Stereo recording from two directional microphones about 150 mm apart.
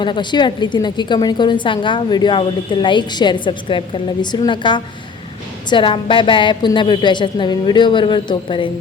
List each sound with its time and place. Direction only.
0.0 s a woman's voice: 30° left (ahead or behind)